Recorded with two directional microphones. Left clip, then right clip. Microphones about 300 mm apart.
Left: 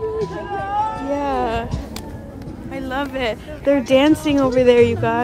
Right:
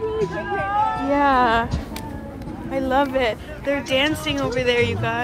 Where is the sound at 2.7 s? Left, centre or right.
Centre.